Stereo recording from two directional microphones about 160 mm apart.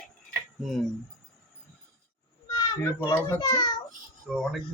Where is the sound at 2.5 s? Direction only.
20° left (ahead or behind).